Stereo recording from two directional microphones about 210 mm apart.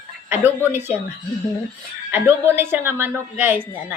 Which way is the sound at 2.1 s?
10° right (ahead or behind).